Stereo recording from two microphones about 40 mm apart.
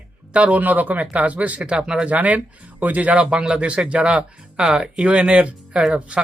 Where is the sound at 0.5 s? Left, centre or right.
Right.